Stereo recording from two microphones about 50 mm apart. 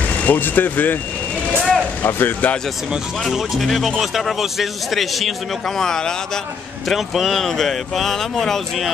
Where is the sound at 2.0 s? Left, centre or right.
Left.